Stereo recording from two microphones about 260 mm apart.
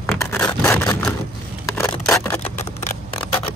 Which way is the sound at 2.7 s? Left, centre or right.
Left.